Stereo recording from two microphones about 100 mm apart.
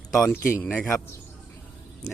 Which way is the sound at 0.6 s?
10° left (ahead or behind).